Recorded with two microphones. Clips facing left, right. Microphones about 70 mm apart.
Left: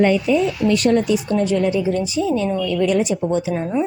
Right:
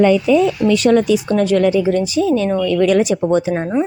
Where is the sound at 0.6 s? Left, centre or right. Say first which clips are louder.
Right 3 dB; right.